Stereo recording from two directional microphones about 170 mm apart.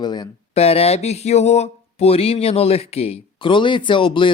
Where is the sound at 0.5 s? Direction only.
35° left (ahead or behind).